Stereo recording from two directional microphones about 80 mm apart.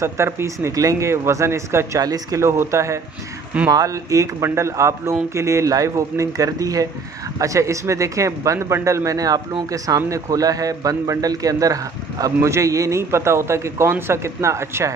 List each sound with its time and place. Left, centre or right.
0.0 s a man's voice: right
2.0 s a man's voice: right
12.4 s a man's voice: right